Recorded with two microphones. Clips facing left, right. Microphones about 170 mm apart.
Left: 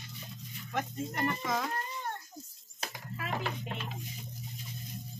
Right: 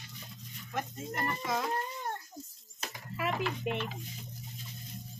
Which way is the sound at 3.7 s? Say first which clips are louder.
Right 7 dB; 60° right (ahead or behind).